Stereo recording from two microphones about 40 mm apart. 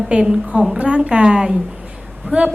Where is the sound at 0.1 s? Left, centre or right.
Right.